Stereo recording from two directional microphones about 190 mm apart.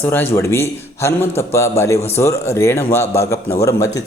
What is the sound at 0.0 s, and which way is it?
A man's voice, 10° left (ahead or behind).